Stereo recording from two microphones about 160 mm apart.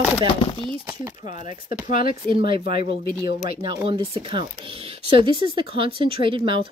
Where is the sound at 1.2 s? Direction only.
50° left (ahead or behind).